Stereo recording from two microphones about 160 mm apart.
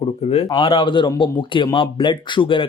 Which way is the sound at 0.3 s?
35° left (ahead or behind).